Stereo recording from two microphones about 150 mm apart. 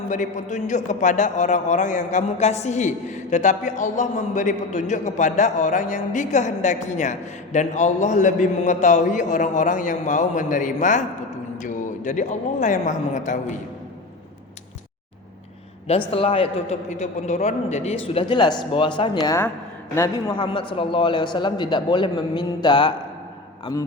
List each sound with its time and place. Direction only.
0.1 s a man's voice: 55° left (ahead or behind)
16.1 s a man's voice: 40° left (ahead or behind); by 19.5 s 25° left (ahead or behind)
20.3 s a man's voice: 35° left (ahead or behind)